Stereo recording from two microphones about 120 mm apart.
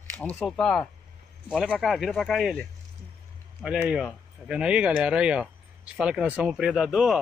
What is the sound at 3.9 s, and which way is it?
Speech, 5° right (ahead or behind).